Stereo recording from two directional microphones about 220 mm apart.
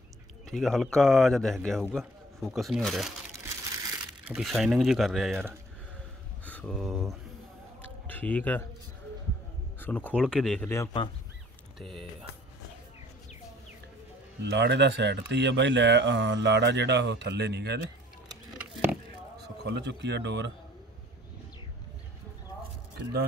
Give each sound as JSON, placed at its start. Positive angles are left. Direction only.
{"t": 0.5, "sound": "a man's voice", "side_deg": 0}
{"t": 4.3, "sound": "a man's voice", "side_deg": 0}
{"t": 6.4, "sound": "speech", "side_deg": 5}
{"t": 8.1, "sound": "speech", "side_deg": 10}
{"t": 9.8, "sound": "speech", "side_deg": 5}
{"t": 11.8, "sound": "a man's voice", "side_deg": 0}
{"t": 14.4, "sound": "speech", "side_deg": -50}
{"t": 18.3, "sound": "a sound", "side_deg": -10}
{"t": 19.4, "sound": "speech", "side_deg": -50}